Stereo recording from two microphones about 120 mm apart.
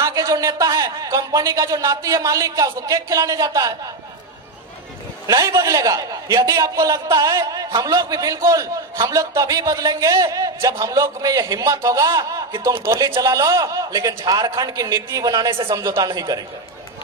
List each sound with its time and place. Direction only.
0.0 s speech: 30° right (ahead or behind)
5.2 s speech: 30° right (ahead or behind)